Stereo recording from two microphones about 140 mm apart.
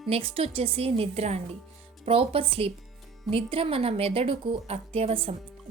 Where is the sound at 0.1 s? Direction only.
45° right (ahead or behind).